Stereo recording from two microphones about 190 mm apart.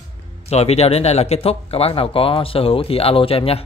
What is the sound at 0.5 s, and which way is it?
Speech, 35° left (ahead or behind).